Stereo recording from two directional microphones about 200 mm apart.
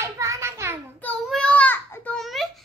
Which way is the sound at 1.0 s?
5° left (ahead or behind).